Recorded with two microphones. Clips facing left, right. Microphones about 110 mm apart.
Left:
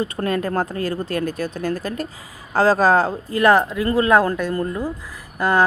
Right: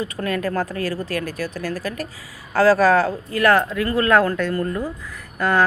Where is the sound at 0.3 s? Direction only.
30° left (ahead or behind).